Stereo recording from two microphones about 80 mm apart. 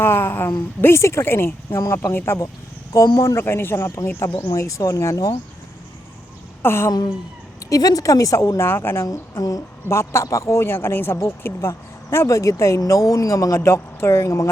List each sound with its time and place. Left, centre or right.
0.0 s speech: left
4.5 s a woman's voice: left
6.6 s a woman's voice: left
7.7 s a woman's voice: left